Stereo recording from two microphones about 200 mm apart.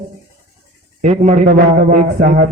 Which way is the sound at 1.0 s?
35° right (ahead or behind).